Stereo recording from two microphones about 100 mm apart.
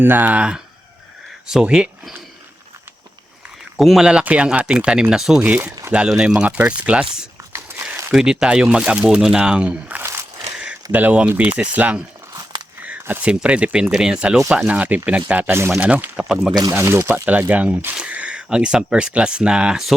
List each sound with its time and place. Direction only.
0.0 s speech: 20° right (ahead or behind)
3.8 s speech: centre (ahead or behind)
7.5 s a sound: 25° right (ahead or behind)
8.1 s speech: 5° right (ahead or behind)
10.0 s a sound: 25° right (ahead or behind)
10.9 s speech: 15° right (ahead or behind)
15.8 s speech: 10° right (ahead or behind)
16.7 s speech: 25° right (ahead or behind); by 19.9 s 5° right (ahead or behind)